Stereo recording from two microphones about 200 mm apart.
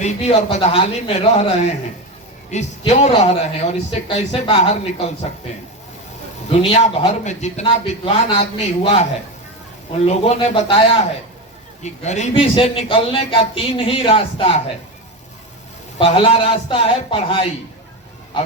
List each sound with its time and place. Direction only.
0.0 s a man's voice: 30° left (ahead or behind)
2.9 s a man's voice: 30° left (ahead or behind)
6.5 s a man's voice: 30° left (ahead or behind)
10.1 s a man's voice: 30° left (ahead or behind)
16.0 s a man's voice: 25° left (ahead or behind)